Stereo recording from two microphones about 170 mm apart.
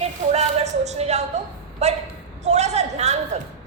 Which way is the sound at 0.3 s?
40° right (ahead or behind).